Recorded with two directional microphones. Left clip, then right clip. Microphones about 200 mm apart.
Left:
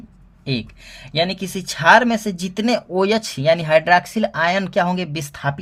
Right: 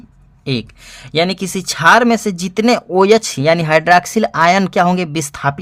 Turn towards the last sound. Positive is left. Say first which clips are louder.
# right 6 dB
turn(degrees=-35)  # may be behind; listen again after turning